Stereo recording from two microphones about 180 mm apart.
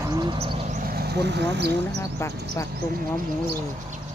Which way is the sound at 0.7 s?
55° right (ahead or behind).